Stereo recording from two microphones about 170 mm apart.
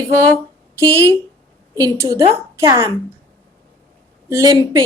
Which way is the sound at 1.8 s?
20° right (ahead or behind).